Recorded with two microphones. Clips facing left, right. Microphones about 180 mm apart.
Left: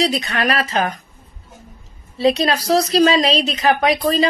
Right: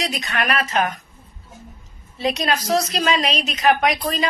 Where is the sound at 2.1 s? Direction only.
35° left (ahead or behind).